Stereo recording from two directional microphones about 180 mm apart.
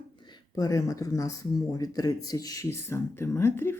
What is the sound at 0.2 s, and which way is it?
Speech, 25° left (ahead or behind).